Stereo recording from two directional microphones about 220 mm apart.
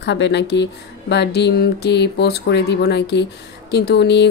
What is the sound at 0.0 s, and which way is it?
Speech, 50° left (ahead or behind).